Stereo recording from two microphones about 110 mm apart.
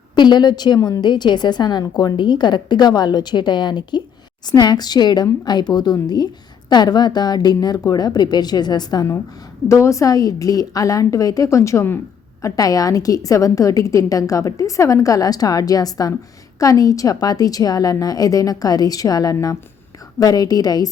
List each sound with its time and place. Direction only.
0.2 s a woman's voice: 40° left (ahead or behind)
9.6 s a woman's voice: 25° left (ahead or behind)